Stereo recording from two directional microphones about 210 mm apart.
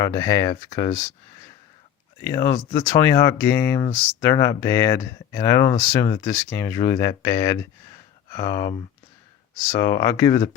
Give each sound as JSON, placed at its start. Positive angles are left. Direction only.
{"t": 0.0, "sound": "speech", "side_deg": 20}
{"t": 2.2, "sound": "speech", "side_deg": 15}
{"t": 9.7, "sound": "speech", "side_deg": 15}